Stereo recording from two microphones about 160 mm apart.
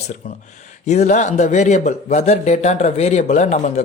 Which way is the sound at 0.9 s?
45° left (ahead or behind).